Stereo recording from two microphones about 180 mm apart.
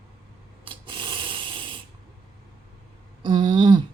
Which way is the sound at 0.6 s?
30° right (ahead or behind).